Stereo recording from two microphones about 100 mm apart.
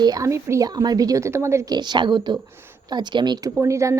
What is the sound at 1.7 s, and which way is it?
Speech, 45° right (ahead or behind).